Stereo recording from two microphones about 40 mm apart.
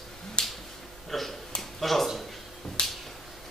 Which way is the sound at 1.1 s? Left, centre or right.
Centre.